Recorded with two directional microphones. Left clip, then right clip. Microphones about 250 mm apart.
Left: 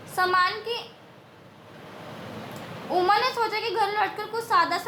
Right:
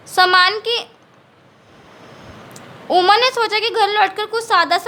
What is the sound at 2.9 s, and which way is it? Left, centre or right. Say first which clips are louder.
A woman's voice: right 9 dB; right.